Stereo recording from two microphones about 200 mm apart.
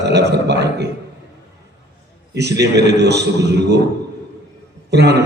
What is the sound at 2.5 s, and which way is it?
A man's voice, 60° right (ahead or behind).